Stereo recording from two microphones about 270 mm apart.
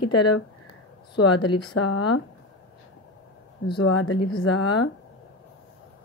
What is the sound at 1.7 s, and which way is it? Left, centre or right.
Speech, left.